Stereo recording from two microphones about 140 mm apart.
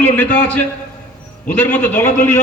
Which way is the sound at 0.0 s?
15° left (ahead or behind).